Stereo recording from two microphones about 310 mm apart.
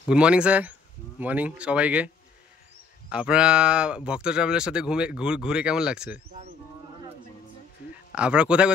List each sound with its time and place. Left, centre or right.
0.1 s speech: centre
3.1 s speech: centre
8.1 s speech: centre